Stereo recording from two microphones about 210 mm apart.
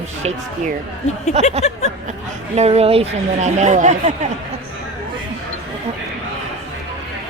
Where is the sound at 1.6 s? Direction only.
30° left (ahead or behind).